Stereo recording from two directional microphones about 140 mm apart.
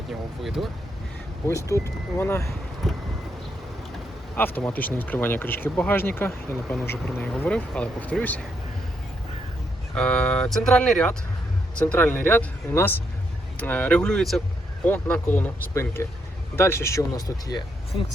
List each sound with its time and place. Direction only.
0.1 s speech: centre (ahead or behind)
1.5 s speech: 20° left (ahead or behind)
2.8 s speech: centre (ahead or behind)
4.4 s speech: 15° left (ahead or behind)
9.9 s speech: 5° left (ahead or behind)
14.8 s speech: 15° left (ahead or behind)